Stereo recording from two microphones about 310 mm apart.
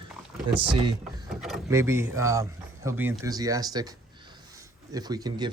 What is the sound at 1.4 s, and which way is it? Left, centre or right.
Speech, centre.